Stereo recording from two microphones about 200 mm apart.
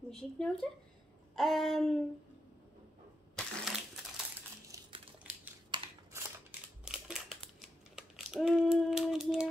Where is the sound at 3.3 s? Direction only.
Centre (ahead or behind).